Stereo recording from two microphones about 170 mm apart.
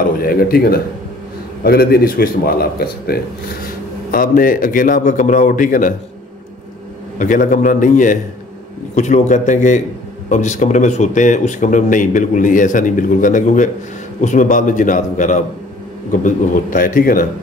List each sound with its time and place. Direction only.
0.2 s a man's voice: 60° left (ahead or behind)
7.2 s speech: 50° left (ahead or behind)